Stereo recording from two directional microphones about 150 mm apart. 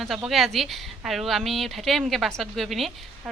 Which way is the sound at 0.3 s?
Centre (ahead or behind).